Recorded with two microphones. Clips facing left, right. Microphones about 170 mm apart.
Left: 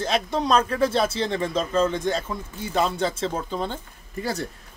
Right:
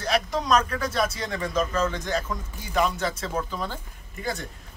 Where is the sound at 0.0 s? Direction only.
25° left (ahead or behind).